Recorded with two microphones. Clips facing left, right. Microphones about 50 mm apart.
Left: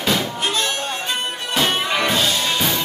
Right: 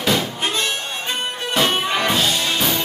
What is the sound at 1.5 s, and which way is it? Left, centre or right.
Music, centre.